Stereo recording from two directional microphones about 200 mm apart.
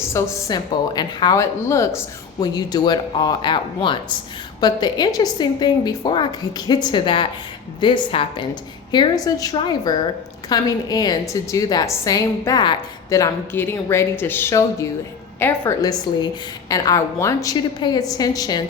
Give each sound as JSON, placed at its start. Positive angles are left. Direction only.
{"t": 0.1, "sound": "a woman's voice", "side_deg": 15}